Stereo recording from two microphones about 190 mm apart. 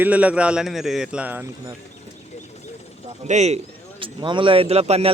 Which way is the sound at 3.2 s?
35° right (ahead or behind).